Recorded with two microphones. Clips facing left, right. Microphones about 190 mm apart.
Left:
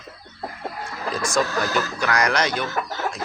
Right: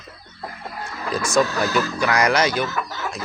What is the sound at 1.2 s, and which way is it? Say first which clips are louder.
Speech: right 3 dB; 5° right (ahead or behind).